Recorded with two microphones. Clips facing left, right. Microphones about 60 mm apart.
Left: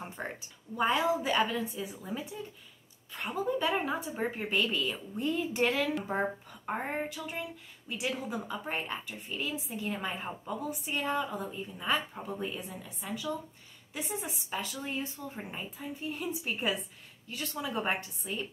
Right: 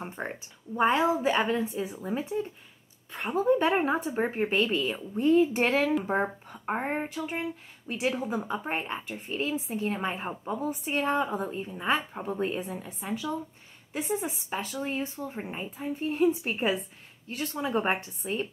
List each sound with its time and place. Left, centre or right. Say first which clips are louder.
0.0 s a sound: right 4 dB; right
0.7 s a woman's voice: right 4 dB; right
16.0 s a woman's voice: right 12 dB; right